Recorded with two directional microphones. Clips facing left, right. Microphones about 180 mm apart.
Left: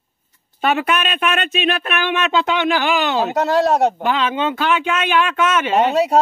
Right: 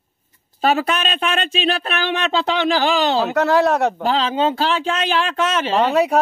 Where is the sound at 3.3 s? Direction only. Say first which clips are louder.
Left 1 dB; 60° right (ahead or behind).